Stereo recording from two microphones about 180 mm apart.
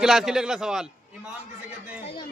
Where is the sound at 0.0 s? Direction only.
Centre (ahead or behind).